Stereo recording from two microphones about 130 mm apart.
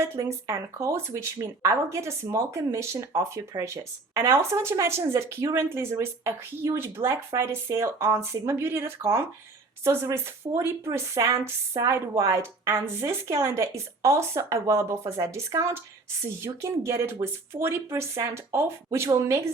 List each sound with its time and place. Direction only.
0.0 s speech: 20° right (ahead or behind)